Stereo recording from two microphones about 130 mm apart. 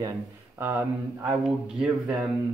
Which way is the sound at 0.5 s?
15° right (ahead or behind).